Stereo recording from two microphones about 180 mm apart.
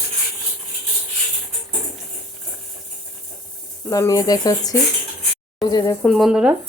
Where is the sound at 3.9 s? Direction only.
20° left (ahead or behind).